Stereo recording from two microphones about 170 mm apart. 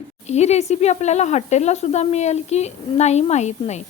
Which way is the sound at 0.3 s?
40° left (ahead or behind).